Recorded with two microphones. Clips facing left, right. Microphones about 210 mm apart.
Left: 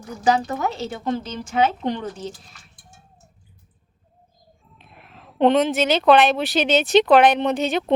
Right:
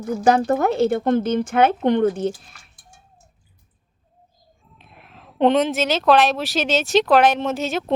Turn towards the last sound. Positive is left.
turn(degrees=0)  # may be behind; listen again after turning